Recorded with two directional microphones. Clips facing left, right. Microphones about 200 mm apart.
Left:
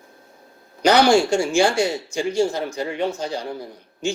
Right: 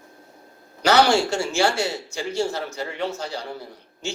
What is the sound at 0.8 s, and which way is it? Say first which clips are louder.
Speech: left 3 dB; 15° left (ahead or behind).